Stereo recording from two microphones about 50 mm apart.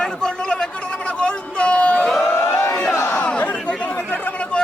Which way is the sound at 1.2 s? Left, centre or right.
Left.